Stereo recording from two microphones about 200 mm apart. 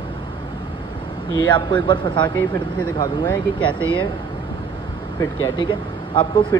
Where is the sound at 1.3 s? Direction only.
25° left (ahead or behind).